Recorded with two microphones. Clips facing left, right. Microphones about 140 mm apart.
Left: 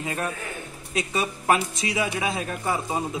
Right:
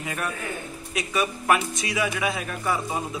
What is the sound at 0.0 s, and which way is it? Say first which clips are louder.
Speech: left 1 dB; 30° left (ahead or behind).